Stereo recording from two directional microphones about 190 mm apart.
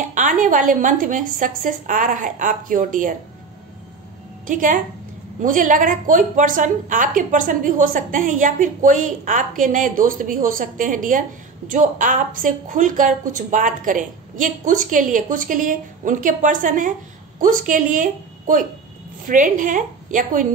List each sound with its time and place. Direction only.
0.0 s a woman's voice: 40° right (ahead or behind)
4.5 s a woman's voice: 45° right (ahead or behind)